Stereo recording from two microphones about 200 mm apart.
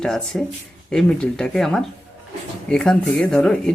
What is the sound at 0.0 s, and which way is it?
Speech, 5° left (ahead or behind).